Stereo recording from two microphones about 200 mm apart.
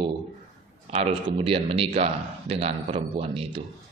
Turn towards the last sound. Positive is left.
turn(degrees=-30)  # may be behind; listen again after turning